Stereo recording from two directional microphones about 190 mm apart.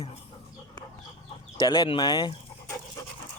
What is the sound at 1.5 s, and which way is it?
Speech, 20° left (ahead or behind).